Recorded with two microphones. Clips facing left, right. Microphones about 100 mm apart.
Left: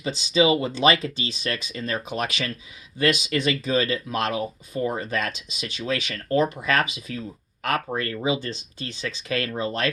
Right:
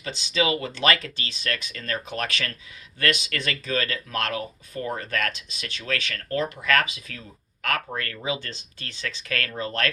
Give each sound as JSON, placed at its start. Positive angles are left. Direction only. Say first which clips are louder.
{"t": 0.0, "sound": "speech", "louder": "left 5 dB", "side_deg": 20}